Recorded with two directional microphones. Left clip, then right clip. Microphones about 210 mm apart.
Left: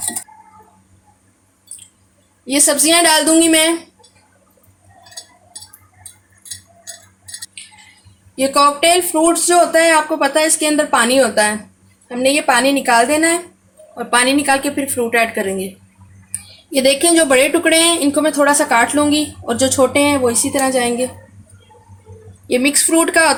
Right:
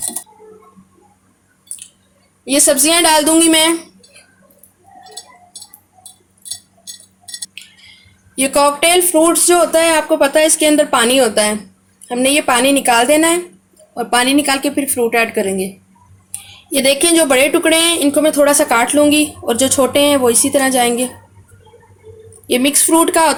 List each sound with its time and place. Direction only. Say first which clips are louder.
2.4 s a woman's voice: right 2 dB; 40° right (ahead or behind)
8.4 s a woman's voice: even; 40° right (ahead or behind)
16.7 s a woman's voice: even; 30° right (ahead or behind)
22.5 s a woman's voice: right 1 dB; 35° right (ahead or behind)